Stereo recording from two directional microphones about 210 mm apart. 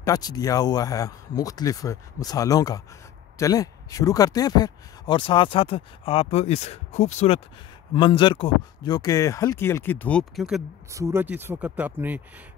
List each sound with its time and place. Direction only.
0.0 s speech: 20° left (ahead or behind); by 10.6 s centre (ahead or behind)
10.9 s speech: 15° right (ahead or behind)